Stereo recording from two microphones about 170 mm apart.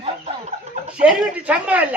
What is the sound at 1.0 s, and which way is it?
Speech, 10° right (ahead or behind).